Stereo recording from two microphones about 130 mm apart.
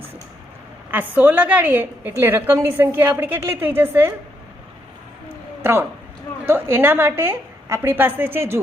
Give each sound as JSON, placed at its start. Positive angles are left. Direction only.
{"t": 0.9, "sound": "a woman's voice", "side_deg": -15}
{"t": 6.4, "sound": "a woman's voice", "side_deg": -15}